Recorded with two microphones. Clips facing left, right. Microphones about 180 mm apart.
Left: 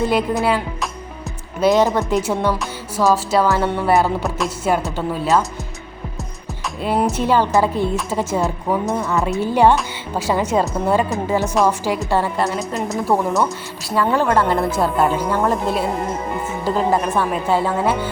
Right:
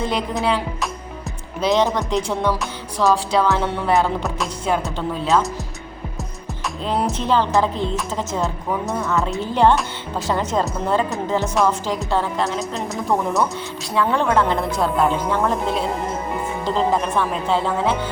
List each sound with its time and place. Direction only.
0.0 s music: 5° left (ahead or behind)
6.8 s a woman's voice: 10° left (ahead or behind)
9.1 s a woman's voice: 5° left (ahead or behind)
13.9 s music: 5° left (ahead or behind)